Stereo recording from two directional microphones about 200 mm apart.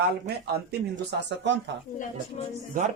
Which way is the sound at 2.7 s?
45° right (ahead or behind).